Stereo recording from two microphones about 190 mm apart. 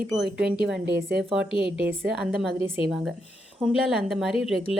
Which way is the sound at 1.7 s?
10° right (ahead or behind).